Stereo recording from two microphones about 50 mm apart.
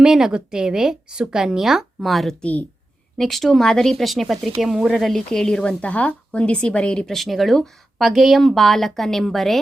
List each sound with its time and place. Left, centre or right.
0.0 s speech: centre
5.1 s a woman's voice: centre
5.8 s a woman's voice: left
7.0 s speech: centre